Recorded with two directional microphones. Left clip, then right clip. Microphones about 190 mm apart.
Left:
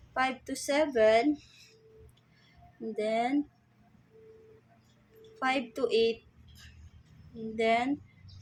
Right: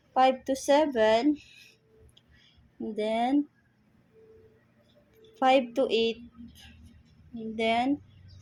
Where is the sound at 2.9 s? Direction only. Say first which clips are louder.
Right 2 dB; 20° right (ahead or behind).